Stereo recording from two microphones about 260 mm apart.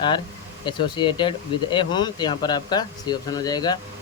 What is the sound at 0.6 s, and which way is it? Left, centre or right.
Speech, centre.